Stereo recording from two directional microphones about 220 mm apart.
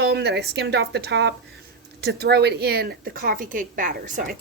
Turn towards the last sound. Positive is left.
turn(degrees=-40)  # may be behind; listen again after turning